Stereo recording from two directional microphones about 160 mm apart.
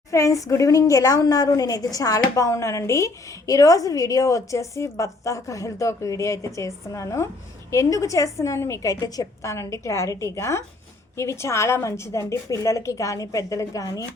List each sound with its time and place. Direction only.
0.1 s a woman's voice: 20° left (ahead or behind)